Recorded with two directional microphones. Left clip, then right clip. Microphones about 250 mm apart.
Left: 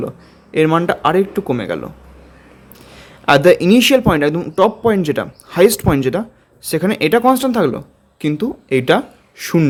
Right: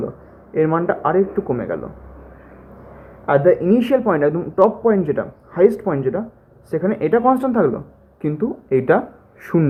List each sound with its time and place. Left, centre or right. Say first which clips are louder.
0.5 s speech: left 4 dB; left
3.2 s speech: left 4 dB; left